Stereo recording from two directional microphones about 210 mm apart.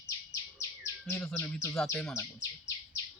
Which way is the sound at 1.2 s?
5° left (ahead or behind).